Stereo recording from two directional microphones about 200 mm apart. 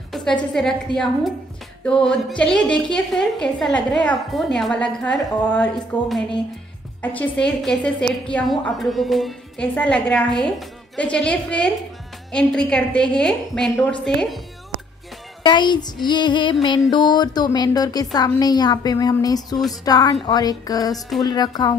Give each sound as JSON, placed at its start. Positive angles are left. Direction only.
{"t": 0.4, "sound": "a woman's voice", "side_deg": 5}
{"t": 15.4, "sound": "a woman's voice", "side_deg": 20}